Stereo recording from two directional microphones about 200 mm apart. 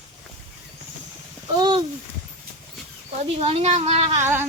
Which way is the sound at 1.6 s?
20° right (ahead or behind).